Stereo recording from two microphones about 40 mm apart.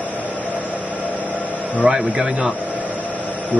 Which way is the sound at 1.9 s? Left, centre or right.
Centre.